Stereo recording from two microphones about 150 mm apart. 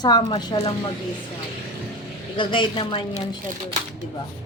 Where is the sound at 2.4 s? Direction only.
30° left (ahead or behind).